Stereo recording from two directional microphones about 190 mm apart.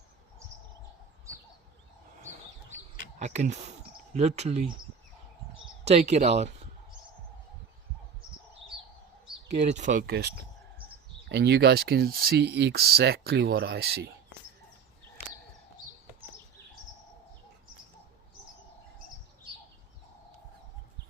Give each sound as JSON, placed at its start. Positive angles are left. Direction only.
{"t": 3.2, "sound": "speech", "side_deg": -40}
{"t": 5.8, "sound": "speech", "side_deg": -35}
{"t": 9.5, "sound": "speech", "side_deg": -35}